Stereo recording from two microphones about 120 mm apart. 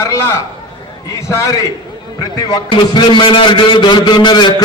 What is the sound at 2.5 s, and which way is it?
A man's voice, 40° left (ahead or behind).